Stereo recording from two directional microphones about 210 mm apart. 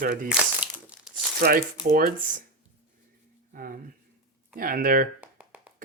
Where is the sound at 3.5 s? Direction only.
40° right (ahead or behind).